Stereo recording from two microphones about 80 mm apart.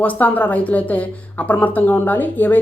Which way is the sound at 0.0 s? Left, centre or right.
Left.